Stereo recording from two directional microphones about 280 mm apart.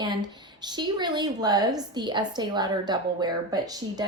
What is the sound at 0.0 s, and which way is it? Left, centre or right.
A woman's voice, centre.